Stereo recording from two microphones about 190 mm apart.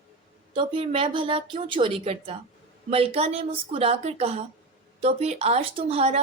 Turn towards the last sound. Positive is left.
turn(degrees=-30)  # may be behind; listen again after turning